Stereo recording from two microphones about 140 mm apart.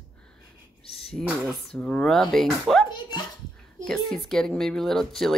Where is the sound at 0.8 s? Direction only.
45° left (ahead or behind).